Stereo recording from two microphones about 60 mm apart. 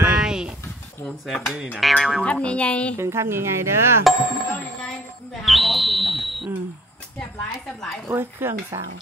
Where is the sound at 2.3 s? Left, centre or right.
Centre.